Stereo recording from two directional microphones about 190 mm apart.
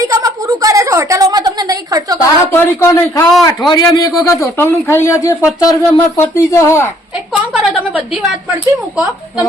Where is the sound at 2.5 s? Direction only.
10° left (ahead or behind).